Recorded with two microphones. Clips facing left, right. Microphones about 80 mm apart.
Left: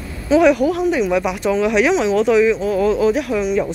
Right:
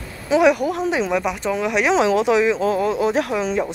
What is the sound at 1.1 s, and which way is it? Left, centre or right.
Speech, centre.